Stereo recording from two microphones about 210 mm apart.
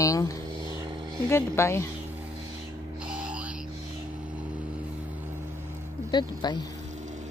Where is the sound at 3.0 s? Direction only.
5° right (ahead or behind).